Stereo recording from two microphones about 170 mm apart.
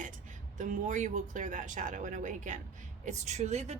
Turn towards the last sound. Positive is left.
turn(degrees=-40)  # may be behind; listen again after turning